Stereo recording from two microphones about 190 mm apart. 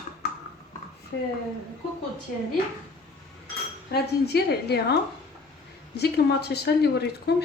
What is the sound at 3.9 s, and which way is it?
Speech, 60° left (ahead or behind).